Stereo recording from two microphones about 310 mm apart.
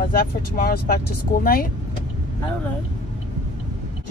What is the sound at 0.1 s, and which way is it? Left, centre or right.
Speech, left.